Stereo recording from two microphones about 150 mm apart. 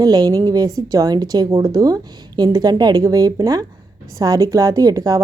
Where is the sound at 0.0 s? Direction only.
25° right (ahead or behind).